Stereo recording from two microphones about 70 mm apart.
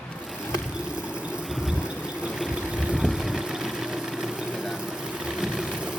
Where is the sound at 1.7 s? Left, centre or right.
Centre.